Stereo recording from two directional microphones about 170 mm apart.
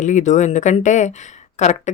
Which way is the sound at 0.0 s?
45° left (ahead or behind).